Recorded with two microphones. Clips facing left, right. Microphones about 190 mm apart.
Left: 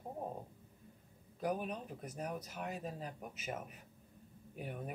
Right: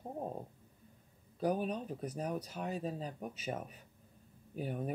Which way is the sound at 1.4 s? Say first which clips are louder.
Right 4 dB; 35° right (ahead or behind).